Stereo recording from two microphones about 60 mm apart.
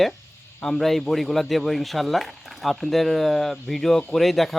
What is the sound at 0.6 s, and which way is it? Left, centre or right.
Speech, centre.